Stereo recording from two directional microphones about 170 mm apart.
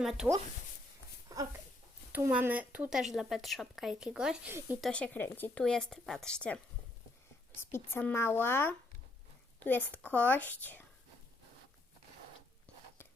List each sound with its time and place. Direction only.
0.0 s speech: centre (ahead or behind)
1.3 s a sound: 20° right (ahead or behind)
2.1 s speech: 10° right (ahead or behind)
4.8 s speech: 5° left (ahead or behind)
7.7 s speech: 15° left (ahead or behind)